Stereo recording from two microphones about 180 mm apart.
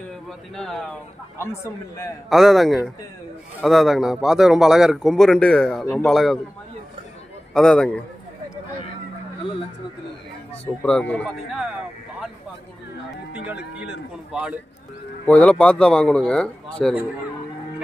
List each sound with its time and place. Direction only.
0.1 s speech: centre (ahead or behind)
1.4 s a man's voice: 15° left (ahead or behind)
2.2 s speech: centre (ahead or behind)
7.5 s speech: 5° left (ahead or behind)
10.8 s speech: 5° left (ahead or behind)
13.3 s speech: 10° right (ahead or behind)
15.2 s speech: 5° left (ahead or behind)